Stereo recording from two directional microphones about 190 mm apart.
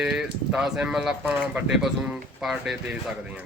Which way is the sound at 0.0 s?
Centre (ahead or behind).